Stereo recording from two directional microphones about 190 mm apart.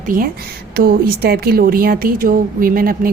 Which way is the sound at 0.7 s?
55° right (ahead or behind).